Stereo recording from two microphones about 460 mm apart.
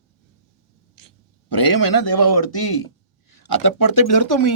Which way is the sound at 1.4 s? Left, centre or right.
Left.